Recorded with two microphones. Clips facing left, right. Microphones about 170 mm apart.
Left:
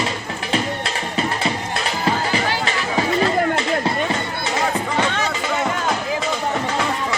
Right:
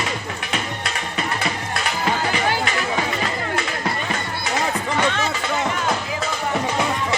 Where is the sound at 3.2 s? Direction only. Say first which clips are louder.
Left 6 dB; 25° left (ahead or behind).